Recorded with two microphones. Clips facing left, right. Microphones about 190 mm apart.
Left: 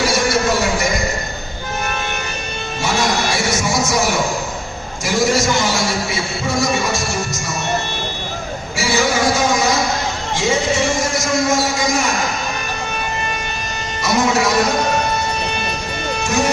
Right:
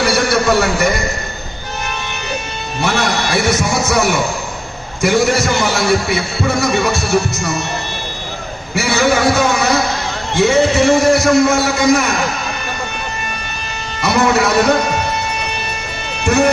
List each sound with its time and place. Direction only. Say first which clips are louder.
0.0 s a sound: right 2 dB; 60° right (ahead or behind)
2.8 s music: right 1 dB; 60° right (ahead or behind)
5.0 s a man's voice: right 3 dB; 60° right (ahead or behind)
8.7 s a man's voice: right 4 dB; 60° right (ahead or behind)
14.0 s music: right 3 dB; 60° right (ahead or behind)